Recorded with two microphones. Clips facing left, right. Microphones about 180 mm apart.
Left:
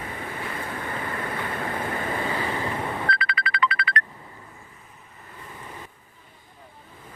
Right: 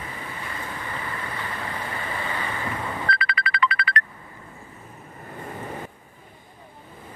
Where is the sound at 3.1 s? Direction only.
50° right (ahead or behind).